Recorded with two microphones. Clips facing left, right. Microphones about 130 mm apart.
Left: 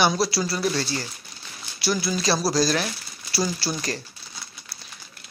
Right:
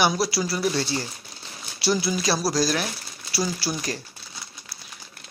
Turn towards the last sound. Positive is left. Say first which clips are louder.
# even
turn(degrees=-10)  # may be behind; listen again after turning